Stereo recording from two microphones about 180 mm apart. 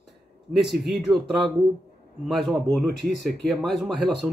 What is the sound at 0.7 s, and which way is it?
Speech, 65° right (ahead or behind).